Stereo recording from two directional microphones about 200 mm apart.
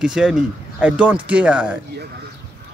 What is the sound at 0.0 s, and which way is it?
Speech, 5° right (ahead or behind).